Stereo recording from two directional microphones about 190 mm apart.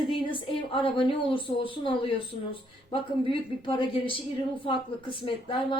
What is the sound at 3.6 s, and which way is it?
A woman's voice, 25° left (ahead or behind).